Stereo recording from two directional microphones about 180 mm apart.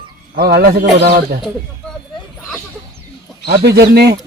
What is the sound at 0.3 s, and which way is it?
A man's voice, 60° right (ahead or behind).